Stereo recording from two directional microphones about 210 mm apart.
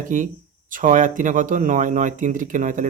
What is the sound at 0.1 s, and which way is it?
Speech, 40° right (ahead or behind).